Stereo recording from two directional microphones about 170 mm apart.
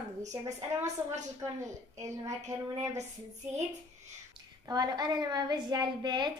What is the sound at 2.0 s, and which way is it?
Speech, 20° right (ahead or behind).